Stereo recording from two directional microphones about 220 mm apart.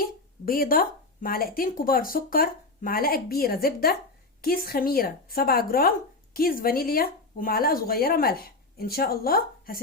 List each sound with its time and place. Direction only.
0.0 s speech: 40° left (ahead or behind)